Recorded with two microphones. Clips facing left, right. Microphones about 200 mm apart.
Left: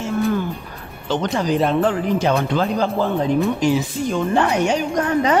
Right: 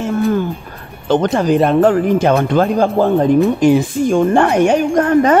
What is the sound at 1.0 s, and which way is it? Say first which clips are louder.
A woman's voice: right 7 dB; 55° right (ahead or behind).